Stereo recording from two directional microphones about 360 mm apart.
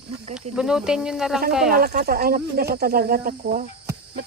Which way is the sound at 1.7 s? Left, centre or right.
Right.